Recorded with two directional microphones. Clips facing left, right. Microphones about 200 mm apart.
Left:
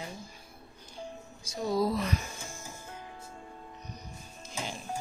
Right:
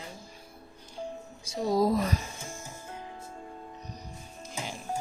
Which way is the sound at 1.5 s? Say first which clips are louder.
Right 3 dB; 40° right (ahead or behind).